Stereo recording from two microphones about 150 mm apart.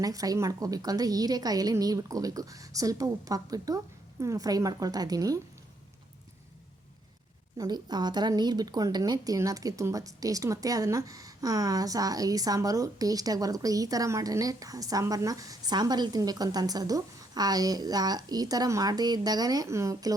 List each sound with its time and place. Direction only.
0.0 s a woman's voice: 25° right (ahead or behind)
7.6 s a woman's voice: 25° right (ahead or behind)